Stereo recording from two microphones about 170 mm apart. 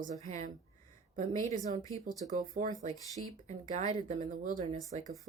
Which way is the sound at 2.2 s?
45° right (ahead or behind).